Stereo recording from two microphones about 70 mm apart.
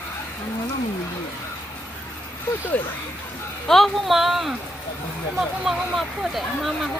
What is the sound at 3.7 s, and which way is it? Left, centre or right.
Speech, centre.